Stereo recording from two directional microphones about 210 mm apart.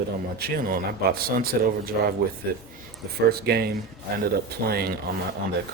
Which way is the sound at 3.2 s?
45° right (ahead or behind).